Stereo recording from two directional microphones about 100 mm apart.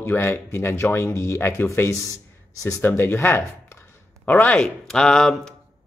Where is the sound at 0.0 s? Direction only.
25° left (ahead or behind).